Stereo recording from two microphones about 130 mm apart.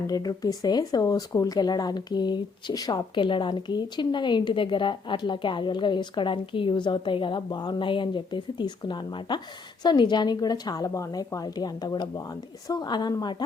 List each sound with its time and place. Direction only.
0.1 s speech: 30° left (ahead or behind)